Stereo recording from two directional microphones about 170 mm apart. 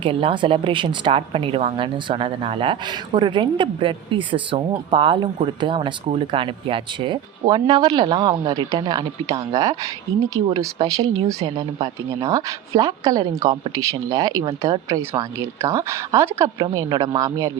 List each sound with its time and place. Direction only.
0.0 s speech: 30° right (ahead or behind)